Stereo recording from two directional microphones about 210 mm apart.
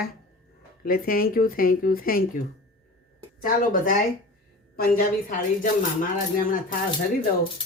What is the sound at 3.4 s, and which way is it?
A woman's voice, 40° left (ahead or behind).